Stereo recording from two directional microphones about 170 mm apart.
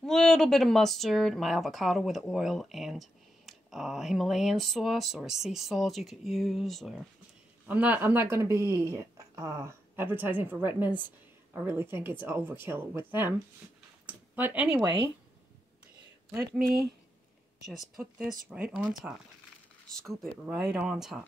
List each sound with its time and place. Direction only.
0.0 s speech: 5° left (ahead or behind)
16.5 s speech: 60° right (ahead or behind)
17.7 s speech: centre (ahead or behind)